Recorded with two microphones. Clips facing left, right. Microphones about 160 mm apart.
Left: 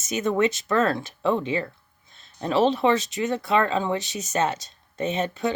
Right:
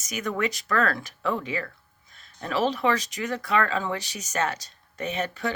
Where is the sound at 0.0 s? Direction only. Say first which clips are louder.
Left 6 dB; 25° left (ahead or behind).